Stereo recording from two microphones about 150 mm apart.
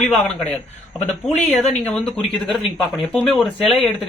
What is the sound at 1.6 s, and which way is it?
Speech, 45° left (ahead or behind).